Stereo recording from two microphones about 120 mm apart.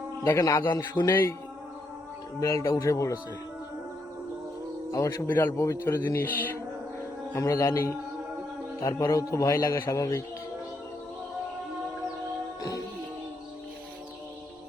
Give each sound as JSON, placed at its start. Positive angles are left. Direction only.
{"t": 0.3, "sound": "a man's voice", "side_deg": 25}
{"t": 2.4, "sound": "a man's voice", "side_deg": 25}
{"t": 4.9, "sound": "a man's voice", "side_deg": 30}